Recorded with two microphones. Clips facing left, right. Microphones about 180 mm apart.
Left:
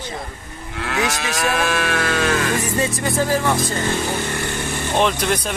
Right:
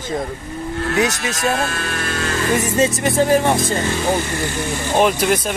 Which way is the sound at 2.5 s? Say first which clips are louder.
Right 4 dB; 20° right (ahead or behind).